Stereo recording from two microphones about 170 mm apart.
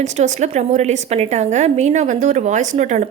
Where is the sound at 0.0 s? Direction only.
40° right (ahead or behind).